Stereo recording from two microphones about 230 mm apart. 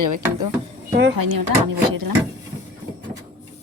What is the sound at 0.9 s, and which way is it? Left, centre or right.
Speech, right.